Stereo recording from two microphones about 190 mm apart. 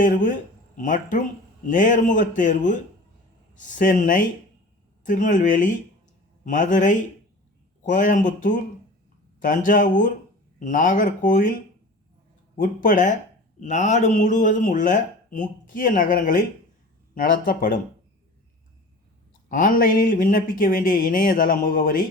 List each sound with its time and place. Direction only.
0.0 s speech: 45° left (ahead or behind)
12.5 s speech: 45° left (ahead or behind)
19.5 s speech: 45° left (ahead or behind)